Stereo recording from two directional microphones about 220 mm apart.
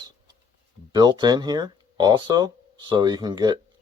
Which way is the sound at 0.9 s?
20° right (ahead or behind).